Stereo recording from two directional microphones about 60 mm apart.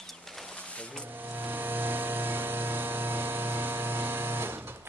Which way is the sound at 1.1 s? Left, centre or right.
Right.